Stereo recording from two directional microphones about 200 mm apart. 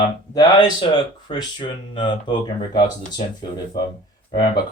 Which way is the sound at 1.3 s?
25° left (ahead or behind).